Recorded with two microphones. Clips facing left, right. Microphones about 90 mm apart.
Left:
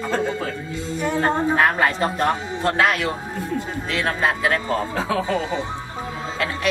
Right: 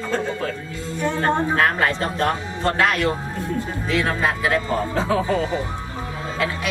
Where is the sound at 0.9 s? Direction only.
15° left (ahead or behind); by 5.2 s centre (ahead or behind).